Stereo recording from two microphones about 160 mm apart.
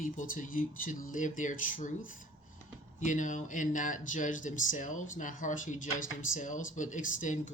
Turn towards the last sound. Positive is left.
turn(degrees=55)  # may be behind; listen again after turning